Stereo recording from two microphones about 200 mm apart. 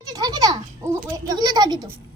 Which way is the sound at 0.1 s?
20° right (ahead or behind).